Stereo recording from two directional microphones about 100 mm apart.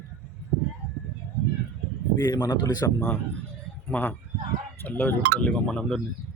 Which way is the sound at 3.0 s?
15° left (ahead or behind).